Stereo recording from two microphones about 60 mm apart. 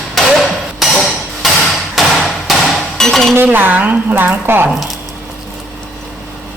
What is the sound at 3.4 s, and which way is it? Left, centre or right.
A woman's voice, right.